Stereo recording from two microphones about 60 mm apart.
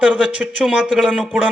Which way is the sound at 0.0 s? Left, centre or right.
Right.